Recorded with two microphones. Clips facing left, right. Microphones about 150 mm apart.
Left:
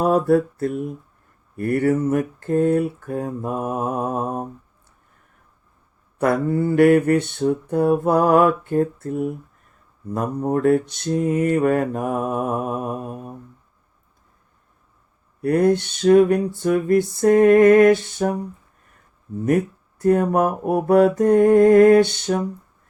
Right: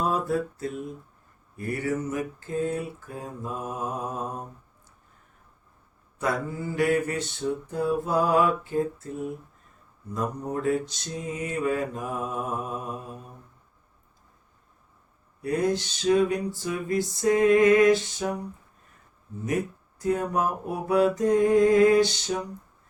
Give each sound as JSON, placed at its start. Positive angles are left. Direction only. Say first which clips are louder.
{"t": 0.0, "sound": "mantra", "louder": "left 9 dB", "side_deg": 60}
{"t": 6.1, "sound": "mantra", "louder": "left 9 dB", "side_deg": 60}
{"t": 15.4, "sound": "mantra", "louder": "left 8 dB", "side_deg": 60}
{"t": 20.0, "sound": "mantra", "louder": "left 8 dB", "side_deg": 55}